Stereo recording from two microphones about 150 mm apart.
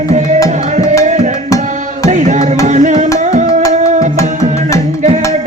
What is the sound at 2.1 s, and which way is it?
Music, 55° right (ahead or behind).